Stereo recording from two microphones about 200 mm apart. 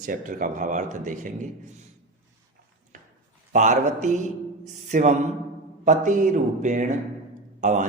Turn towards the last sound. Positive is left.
turn(degrees=-40)  # may be behind; listen again after turning